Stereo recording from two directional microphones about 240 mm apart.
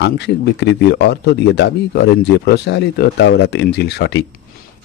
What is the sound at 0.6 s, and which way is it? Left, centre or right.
Speech, left.